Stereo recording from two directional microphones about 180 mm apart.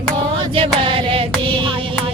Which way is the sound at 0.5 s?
30° right (ahead or behind).